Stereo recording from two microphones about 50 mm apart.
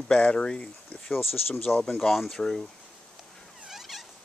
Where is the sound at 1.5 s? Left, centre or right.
Left.